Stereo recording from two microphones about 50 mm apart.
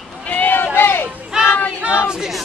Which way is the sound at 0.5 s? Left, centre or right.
Left.